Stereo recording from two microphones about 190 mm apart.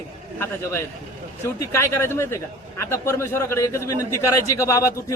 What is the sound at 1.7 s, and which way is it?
Speech, 15° left (ahead or behind).